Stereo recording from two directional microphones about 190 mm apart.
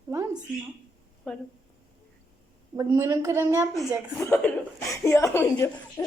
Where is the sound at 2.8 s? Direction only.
15° right (ahead or behind).